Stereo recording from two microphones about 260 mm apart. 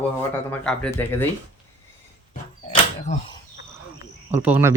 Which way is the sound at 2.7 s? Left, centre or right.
Left.